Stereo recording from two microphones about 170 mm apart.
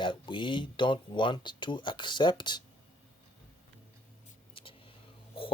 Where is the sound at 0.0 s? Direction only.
30° left (ahead or behind).